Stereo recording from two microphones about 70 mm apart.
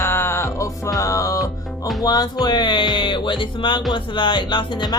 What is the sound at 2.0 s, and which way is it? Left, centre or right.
Speech, left.